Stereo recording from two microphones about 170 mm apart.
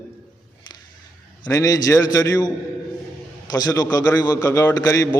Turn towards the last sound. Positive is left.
turn(degrees=20)  # may be behind; listen again after turning